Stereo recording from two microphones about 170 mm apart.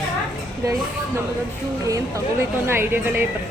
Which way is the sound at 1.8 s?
20° right (ahead or behind).